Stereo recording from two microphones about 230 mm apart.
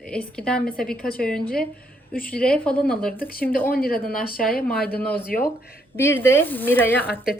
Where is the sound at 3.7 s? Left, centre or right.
Left.